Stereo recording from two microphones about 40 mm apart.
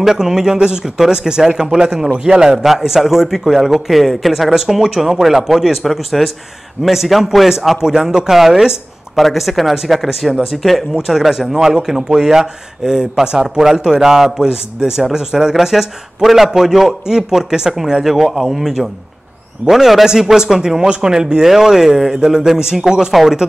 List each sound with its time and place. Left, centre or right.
0.0 s a man's voice: centre
2.6 s a man's voice: centre
19.7 s a man's voice: centre
22.2 s a man's voice: centre